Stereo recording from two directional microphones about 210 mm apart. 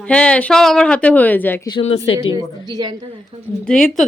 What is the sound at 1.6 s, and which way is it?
Speech, 25° left (ahead or behind).